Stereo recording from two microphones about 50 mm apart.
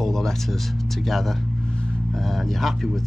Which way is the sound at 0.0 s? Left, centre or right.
Centre.